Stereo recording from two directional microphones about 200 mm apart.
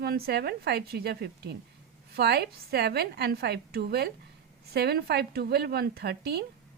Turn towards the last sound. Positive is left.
turn(degrees=-55)  # may be behind; listen again after turning